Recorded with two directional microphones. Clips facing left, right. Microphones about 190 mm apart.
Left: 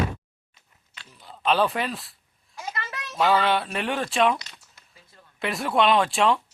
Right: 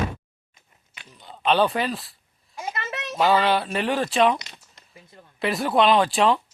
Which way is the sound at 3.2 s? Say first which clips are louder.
Right 2 dB; centre (ahead or behind).